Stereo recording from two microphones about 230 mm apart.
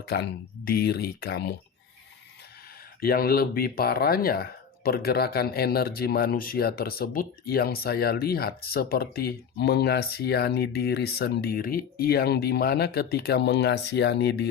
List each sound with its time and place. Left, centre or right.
0.1 s speech: left
3.0 s speech: left